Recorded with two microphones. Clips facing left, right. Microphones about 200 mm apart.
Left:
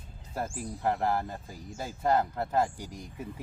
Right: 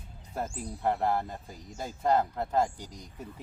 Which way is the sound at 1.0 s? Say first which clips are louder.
Even; 15° right (ahead or behind).